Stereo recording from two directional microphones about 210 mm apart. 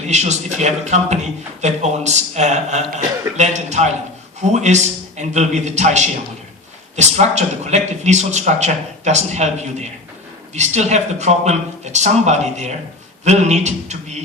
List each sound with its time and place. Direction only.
0.1 s a man's voice: 35° right (ahead or behind)